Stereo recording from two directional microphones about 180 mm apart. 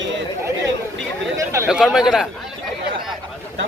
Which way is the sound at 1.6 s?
Centre (ahead or behind).